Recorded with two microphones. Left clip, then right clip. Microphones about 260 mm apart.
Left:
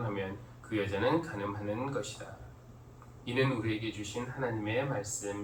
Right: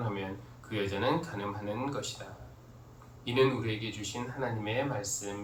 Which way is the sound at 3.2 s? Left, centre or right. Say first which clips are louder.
Right 4 dB; right.